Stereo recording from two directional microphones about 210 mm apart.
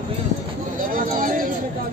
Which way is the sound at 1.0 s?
40° right (ahead or behind).